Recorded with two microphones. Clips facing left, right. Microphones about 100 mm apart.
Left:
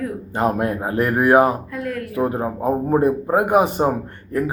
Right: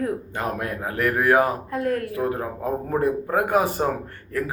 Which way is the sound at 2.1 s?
25° left (ahead or behind).